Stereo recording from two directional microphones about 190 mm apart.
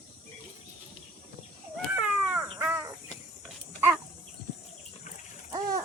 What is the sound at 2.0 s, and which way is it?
Crow, 5° right (ahead or behind).